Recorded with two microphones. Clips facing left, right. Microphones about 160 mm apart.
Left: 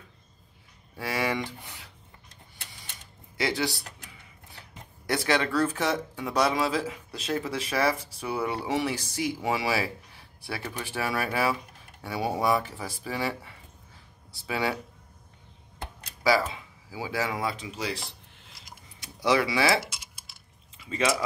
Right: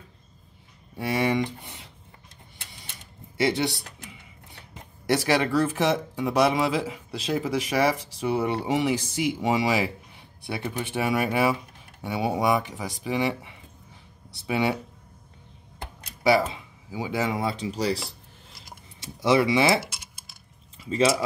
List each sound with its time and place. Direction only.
0.9 s speech: 20° right (ahead or behind)
3.3 s speech: 25° right (ahead or behind)
5.0 s speech: 25° right (ahead or behind)
16.9 s speech: 20° right (ahead or behind); by 18.1 s 40° right (ahead or behind)
18.9 s speech: 25° right (ahead or behind)
19.9 s typing: 60° right (ahead or behind)
20.8 s speech: 30° right (ahead or behind)